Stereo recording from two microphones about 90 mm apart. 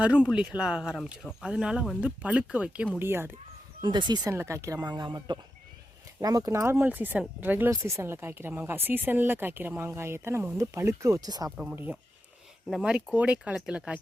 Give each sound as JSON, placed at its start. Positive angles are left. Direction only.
{"t": 0.0, "sound": "speech", "side_deg": -10}
{"t": 3.0, "sound": "speech", "side_deg": -25}
{"t": 3.8, "sound": "speech", "side_deg": -55}
{"t": 4.3, "sound": "speech", "side_deg": -30}
{"t": 4.8, "sound": "speech", "side_deg": -50}
{"t": 6.5, "sound": "speech", "side_deg": -30}
{"t": 7.7, "sound": "speech", "side_deg": -30}
{"t": 11.5, "sound": "speech", "side_deg": -15}
{"t": 13.1, "sound": "speech", "side_deg": -15}